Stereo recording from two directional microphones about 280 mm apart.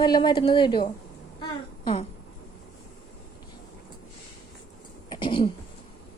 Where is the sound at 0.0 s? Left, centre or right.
Centre.